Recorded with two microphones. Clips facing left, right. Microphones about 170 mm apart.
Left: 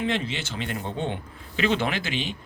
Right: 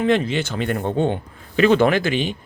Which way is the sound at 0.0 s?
50° right (ahead or behind).